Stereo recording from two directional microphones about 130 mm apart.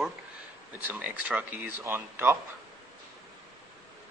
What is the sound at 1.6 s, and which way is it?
Speech, 15° right (ahead or behind).